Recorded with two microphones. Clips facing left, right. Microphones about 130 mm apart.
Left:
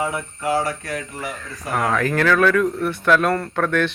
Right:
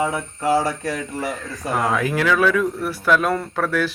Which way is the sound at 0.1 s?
35° right (ahead or behind).